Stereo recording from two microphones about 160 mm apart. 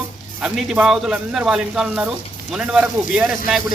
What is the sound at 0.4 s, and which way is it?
Speech, 5° right (ahead or behind).